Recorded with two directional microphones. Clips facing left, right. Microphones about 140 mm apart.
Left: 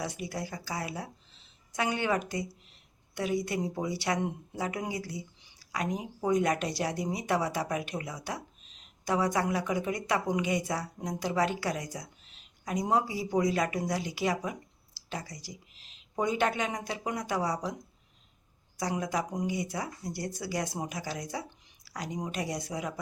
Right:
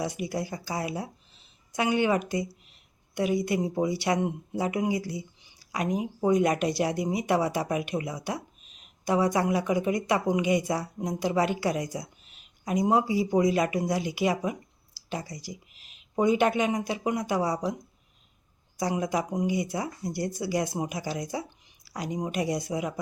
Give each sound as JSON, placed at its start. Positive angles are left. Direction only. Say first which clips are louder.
{"t": 0.0, "sound": "speech", "louder": "right 5 dB", "side_deg": -15}
{"t": 19.1, "sound": "speech", "louder": "right 4 dB", "side_deg": -10}